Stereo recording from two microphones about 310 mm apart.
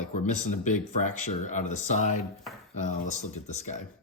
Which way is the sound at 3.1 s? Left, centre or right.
Left.